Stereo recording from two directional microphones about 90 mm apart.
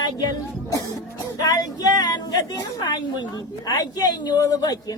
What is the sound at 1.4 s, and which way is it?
Speech, 45° left (ahead or behind).